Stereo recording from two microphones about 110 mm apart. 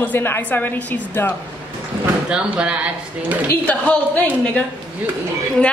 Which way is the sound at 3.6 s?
15° left (ahead or behind).